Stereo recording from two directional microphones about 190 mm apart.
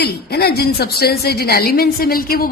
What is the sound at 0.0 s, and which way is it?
A woman's voice, 55° left (ahead or behind).